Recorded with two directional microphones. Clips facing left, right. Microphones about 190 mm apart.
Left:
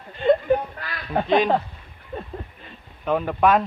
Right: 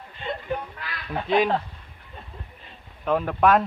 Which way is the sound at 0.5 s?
45° left (ahead or behind).